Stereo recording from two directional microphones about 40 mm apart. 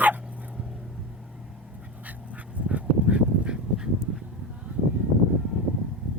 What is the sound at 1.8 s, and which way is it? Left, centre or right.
Dog, right.